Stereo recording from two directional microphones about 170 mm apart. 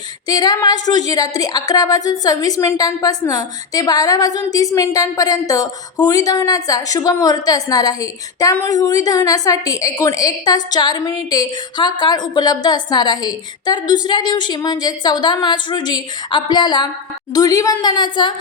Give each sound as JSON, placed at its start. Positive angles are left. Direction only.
{"t": 0.3, "sound": "a woman's voice", "side_deg": 25}